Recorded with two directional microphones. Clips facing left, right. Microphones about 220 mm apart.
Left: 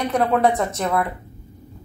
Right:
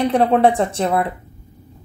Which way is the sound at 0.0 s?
30° right (ahead or behind).